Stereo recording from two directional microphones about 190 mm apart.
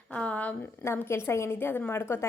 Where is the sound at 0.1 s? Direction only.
5° left (ahead or behind).